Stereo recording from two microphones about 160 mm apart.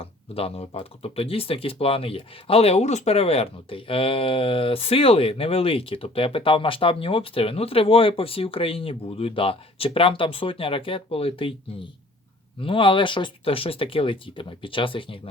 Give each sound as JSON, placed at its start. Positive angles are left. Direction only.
{"t": 0.0, "sound": "speech", "side_deg": 40}